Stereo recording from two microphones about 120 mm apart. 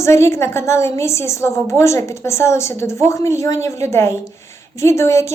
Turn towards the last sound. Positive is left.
turn(degrees=25)  # may be behind; listen again after turning